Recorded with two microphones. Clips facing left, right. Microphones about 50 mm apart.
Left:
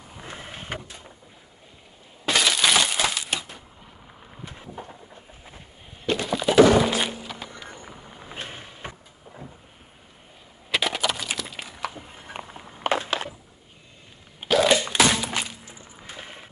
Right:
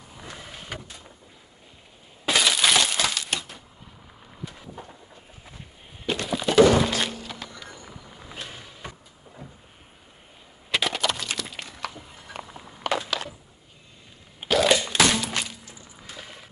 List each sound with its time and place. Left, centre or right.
0.1 s vehicle: left
2.2 s glass: centre
4.5 s vehicle: left
6.0 s thunk: centre
7.5 s vehicle: left
10.7 s a sound: centre
11.9 s a sound: left
14.4 s thunk: centre
15.7 s music: left